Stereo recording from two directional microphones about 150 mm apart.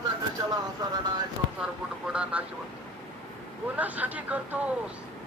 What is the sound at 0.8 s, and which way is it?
Speech, 25° right (ahead or behind).